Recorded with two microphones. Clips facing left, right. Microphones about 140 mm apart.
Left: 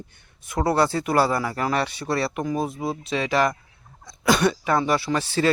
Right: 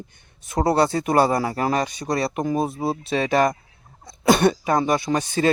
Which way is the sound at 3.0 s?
55° right (ahead or behind).